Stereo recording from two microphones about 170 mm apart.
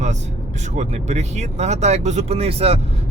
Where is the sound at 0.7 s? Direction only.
45° right (ahead or behind).